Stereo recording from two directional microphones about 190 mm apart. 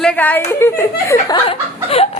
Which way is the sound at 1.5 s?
30° left (ahead or behind).